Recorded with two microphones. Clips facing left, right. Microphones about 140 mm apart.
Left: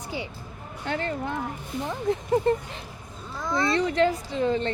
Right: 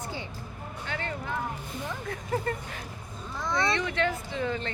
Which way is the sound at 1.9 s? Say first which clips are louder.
Left 9 dB; 25° left (ahead or behind).